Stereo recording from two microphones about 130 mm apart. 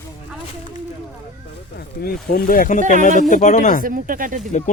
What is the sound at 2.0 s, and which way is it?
Speech, 90° left.